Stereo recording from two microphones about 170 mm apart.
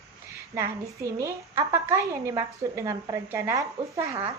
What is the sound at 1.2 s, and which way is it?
A woman's voice, 15° right (ahead or behind).